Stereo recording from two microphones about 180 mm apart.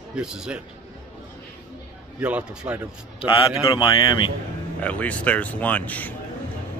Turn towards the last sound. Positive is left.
turn(degrees=10)  # may be behind; listen again after turning